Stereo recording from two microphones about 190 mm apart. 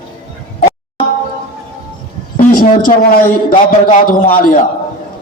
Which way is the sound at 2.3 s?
45° left (ahead or behind).